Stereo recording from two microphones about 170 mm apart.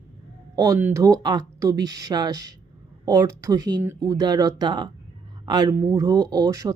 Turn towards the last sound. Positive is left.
turn(degrees=-20)  # may be behind; listen again after turning